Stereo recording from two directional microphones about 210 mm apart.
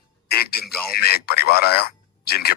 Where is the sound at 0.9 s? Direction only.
50° left (ahead or behind).